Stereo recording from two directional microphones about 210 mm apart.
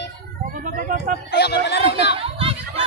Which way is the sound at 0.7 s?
40° right (ahead or behind).